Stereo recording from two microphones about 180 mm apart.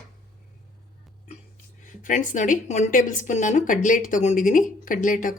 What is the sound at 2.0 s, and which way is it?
A woman's voice, 45° left (ahead or behind).